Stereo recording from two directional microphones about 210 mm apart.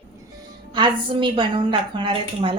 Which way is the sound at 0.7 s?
20° right (ahead or behind).